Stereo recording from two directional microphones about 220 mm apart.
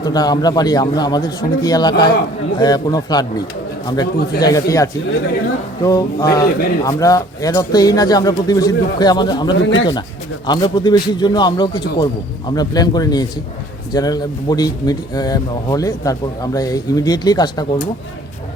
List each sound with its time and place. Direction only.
0.0 s a man's voice: 20° left (ahead or behind)
9.6 s speech: 55° left (ahead or behind)
10.4 s a man's voice: 20° left (ahead or behind)